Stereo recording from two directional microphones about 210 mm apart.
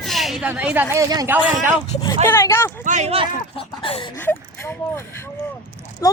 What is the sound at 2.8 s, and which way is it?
Speech, 35° right (ahead or behind).